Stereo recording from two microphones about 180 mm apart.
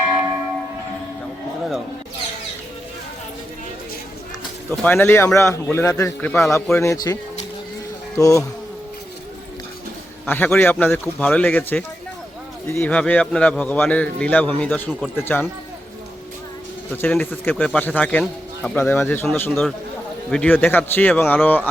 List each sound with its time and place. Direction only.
4.7 s speech: 10° left (ahead or behind)
10.2 s speech: 10° left (ahead or behind)
17.0 s a man's voice: 10° left (ahead or behind)